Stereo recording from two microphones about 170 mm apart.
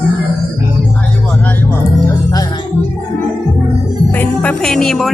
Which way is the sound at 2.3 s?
25° left (ahead or behind).